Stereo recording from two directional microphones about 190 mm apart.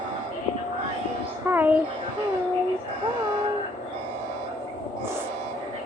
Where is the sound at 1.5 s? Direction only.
10° right (ahead or behind).